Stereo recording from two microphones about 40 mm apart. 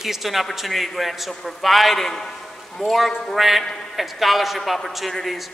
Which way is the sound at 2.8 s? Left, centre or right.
Centre.